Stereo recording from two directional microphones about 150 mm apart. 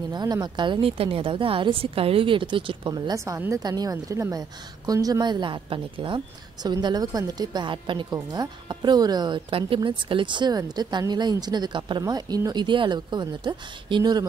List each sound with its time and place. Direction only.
0.1 s a woman's voice: 25° right (ahead or behind)